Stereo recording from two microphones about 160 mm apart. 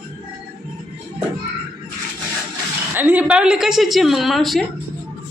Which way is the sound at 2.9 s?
10° right (ahead or behind).